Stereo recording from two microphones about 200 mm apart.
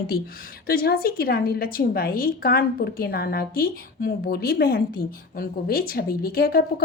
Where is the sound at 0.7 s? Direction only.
50° left (ahead or behind).